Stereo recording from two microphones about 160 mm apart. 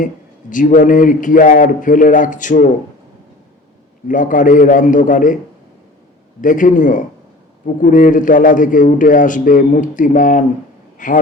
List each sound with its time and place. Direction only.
0.5 s a man's voice: 55° left (ahead or behind)
4.1 s a man's voice: 55° left (ahead or behind)
6.4 s a man's voice: 55° left (ahead or behind)